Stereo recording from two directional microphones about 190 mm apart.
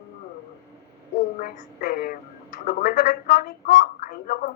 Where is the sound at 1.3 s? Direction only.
45° left (ahead or behind).